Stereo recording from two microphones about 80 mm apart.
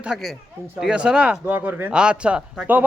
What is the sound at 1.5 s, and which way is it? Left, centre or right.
Speech, right.